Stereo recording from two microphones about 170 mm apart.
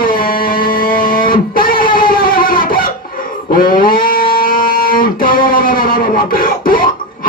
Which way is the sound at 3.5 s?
55° left (ahead or behind).